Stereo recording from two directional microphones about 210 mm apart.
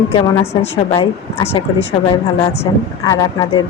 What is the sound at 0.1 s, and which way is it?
Speech, 25° left (ahead or behind).